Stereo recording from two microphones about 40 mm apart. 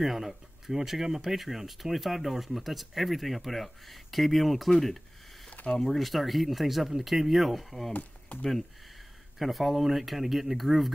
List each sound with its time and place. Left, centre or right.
0.0 s speech: centre
5.5 s a sound: left
5.8 s speech: centre
7.9 s speech: left
9.4 s speech: centre